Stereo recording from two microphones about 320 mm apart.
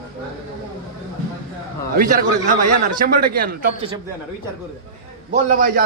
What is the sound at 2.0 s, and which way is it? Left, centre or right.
A man's voice, right.